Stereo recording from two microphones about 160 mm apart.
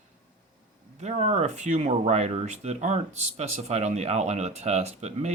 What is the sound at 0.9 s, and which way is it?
Speech, 45° right (ahead or behind).